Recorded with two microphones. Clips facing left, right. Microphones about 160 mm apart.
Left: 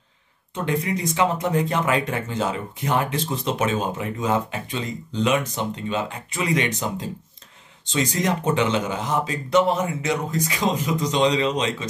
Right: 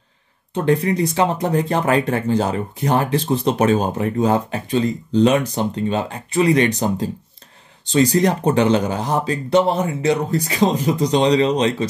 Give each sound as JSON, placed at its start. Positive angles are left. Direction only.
{"t": 0.6, "sound": "speech", "side_deg": -35}